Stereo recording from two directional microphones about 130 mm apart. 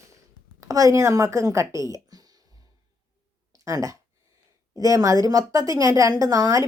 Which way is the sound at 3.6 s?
25° right (ahead or behind).